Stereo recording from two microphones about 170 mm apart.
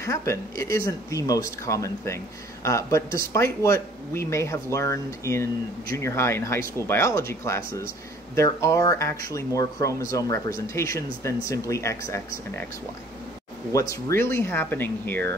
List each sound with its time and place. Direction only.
0.0 s speech: 15° left (ahead or behind)
13.7 s speech: 20° left (ahead or behind)